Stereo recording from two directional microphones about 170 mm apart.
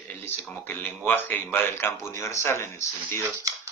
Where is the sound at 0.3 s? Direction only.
10° left (ahead or behind).